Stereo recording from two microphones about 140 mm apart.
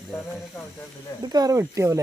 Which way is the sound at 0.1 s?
15° left (ahead or behind).